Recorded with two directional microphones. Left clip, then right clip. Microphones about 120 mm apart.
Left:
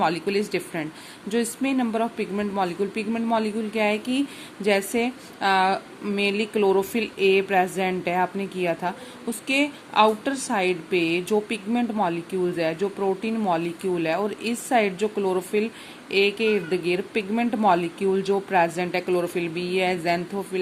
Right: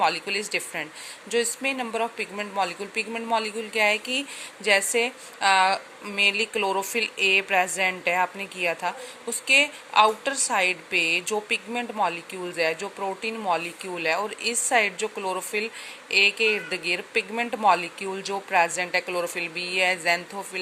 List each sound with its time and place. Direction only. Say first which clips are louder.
0.0 s speech: left 1 dB; 25° right (ahead or behind)